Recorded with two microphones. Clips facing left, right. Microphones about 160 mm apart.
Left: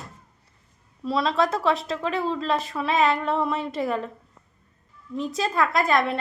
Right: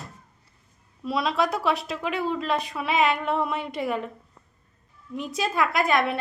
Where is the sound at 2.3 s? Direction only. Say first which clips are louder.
Left 1 dB; 5° right (ahead or behind).